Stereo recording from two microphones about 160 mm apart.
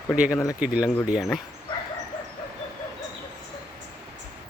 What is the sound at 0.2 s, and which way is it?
Speech, 10° right (ahead or behind).